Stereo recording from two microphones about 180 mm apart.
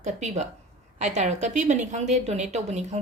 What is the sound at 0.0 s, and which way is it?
A woman's voice, 40° right (ahead or behind).